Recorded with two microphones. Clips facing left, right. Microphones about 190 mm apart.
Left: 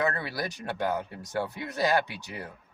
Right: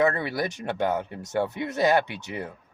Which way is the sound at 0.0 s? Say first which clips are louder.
Right 6 dB; 20° right (ahead or behind).